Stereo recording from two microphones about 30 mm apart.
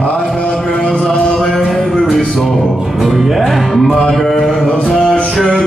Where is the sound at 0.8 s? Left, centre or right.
Left.